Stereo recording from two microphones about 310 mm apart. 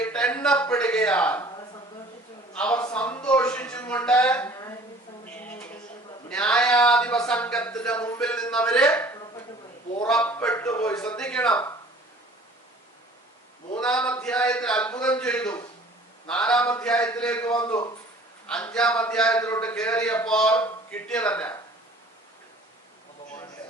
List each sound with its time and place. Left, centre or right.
0.0 s a man's voice: centre
2.6 s a sound: centre
6.2 s a man's voice: centre
13.7 s a man's voice: centre